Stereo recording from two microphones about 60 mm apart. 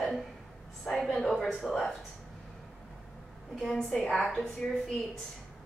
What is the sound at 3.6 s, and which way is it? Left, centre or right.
Speech, centre.